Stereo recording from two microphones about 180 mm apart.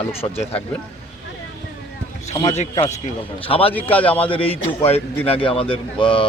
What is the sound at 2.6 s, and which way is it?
Speech, 40° left (ahead or behind).